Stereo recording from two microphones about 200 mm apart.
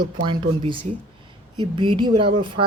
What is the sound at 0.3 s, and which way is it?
Speech, 25° right (ahead or behind).